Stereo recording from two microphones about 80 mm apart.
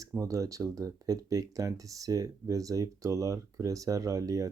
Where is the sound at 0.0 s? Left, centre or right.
Right.